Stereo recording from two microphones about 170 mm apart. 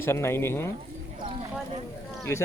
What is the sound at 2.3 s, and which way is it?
Speech, 15° left (ahead or behind).